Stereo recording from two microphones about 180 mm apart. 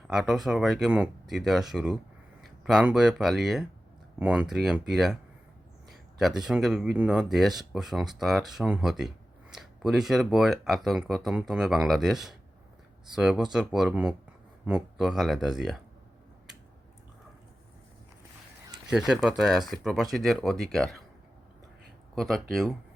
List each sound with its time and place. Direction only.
0.1 s speech: centre (ahead or behind)
6.1 s speech: centre (ahead or behind)
18.9 s speech: 5° right (ahead or behind)
22.1 s speech: centre (ahead or behind)